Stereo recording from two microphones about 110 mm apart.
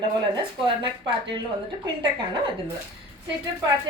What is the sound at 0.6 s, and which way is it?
A woman's voice, 50° right (ahead or behind).